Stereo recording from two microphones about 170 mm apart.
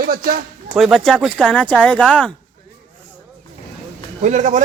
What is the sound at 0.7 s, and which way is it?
Speech, centre (ahead or behind).